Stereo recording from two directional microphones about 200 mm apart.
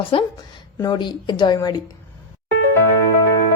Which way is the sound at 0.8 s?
20° left (ahead or behind).